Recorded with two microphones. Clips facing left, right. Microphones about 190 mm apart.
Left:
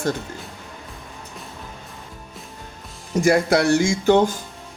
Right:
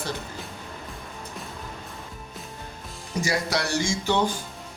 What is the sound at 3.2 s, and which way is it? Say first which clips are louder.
Speech: left 9 dB; 55° left (ahead or behind).